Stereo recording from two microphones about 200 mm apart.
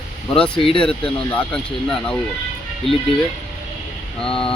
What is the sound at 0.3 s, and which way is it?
Speech, 5° left (ahead or behind).